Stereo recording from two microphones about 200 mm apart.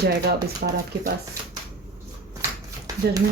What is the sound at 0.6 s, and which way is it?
Speech, 50° right (ahead or behind).